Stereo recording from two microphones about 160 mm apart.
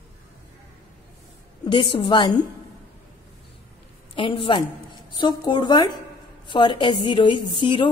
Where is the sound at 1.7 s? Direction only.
30° left (ahead or behind).